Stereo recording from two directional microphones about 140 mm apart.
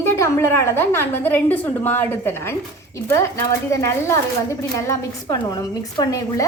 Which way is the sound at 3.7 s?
20° left (ahead or behind).